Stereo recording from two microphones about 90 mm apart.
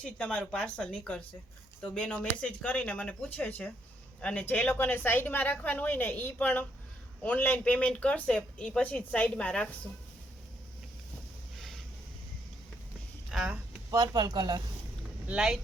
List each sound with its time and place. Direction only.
0.0 s a woman's voice: 10° left (ahead or behind)
11.5 s a sound: centre (ahead or behind)
13.3 s speech: 10° right (ahead or behind)
13.9 s speech: 45° right (ahead or behind)
15.3 s speech: 5° right (ahead or behind)